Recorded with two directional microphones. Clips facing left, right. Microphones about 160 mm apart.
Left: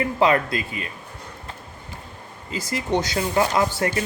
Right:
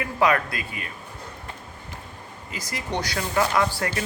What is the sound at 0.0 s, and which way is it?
Speech, 25° left (ahead or behind).